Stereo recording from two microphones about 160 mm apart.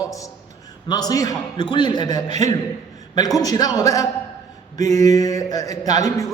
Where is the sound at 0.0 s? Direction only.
20° left (ahead or behind).